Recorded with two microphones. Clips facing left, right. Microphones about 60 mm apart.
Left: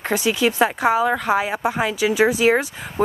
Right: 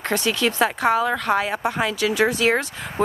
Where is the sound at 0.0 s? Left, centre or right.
Centre.